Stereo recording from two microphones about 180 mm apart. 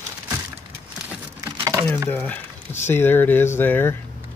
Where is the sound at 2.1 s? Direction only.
10° left (ahead or behind).